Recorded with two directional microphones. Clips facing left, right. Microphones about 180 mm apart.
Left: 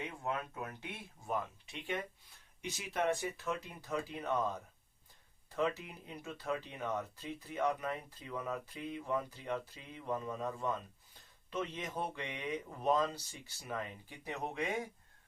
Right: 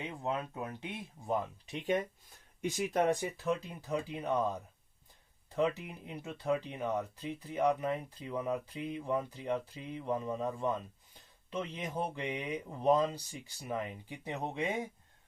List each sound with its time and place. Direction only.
0.0 s speech: 15° right (ahead or behind)
1.7 s speech: 40° right (ahead or behind)
3.4 s speech: 15° right (ahead or behind)
12.2 s speech: 20° right (ahead or behind)